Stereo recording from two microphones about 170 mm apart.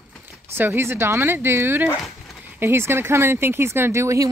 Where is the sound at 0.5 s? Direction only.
15° right (ahead or behind).